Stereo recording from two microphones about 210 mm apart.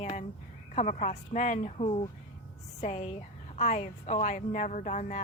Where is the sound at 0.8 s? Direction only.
35° left (ahead or behind).